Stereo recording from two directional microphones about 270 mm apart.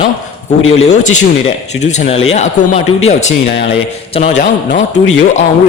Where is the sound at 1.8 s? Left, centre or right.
Left.